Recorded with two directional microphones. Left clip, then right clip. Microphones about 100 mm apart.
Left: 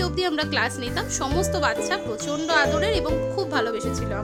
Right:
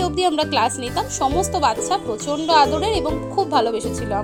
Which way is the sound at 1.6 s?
30° left (ahead or behind).